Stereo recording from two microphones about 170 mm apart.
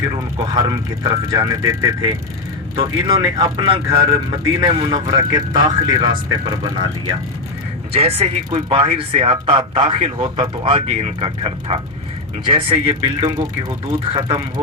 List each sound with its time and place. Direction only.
0.1 s speech: 25° right (ahead or behind)
7.9 s speech: 35° right (ahead or behind)